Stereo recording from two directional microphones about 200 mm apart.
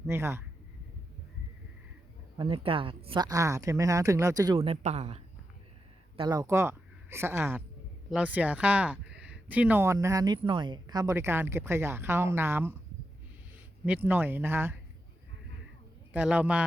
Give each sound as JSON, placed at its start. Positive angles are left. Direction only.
{"t": 0.1, "sound": "speech", "side_deg": -10}
{"t": 2.4, "sound": "speech", "side_deg": -25}
{"t": 6.1, "sound": "speech", "side_deg": -20}
{"t": 13.8, "sound": "speech", "side_deg": -10}
{"t": 16.1, "sound": "speech", "side_deg": -5}